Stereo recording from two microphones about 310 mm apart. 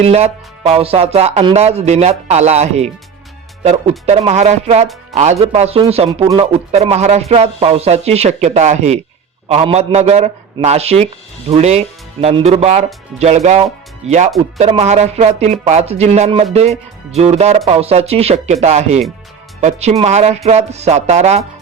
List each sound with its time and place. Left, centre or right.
0.0 s a man's voice: centre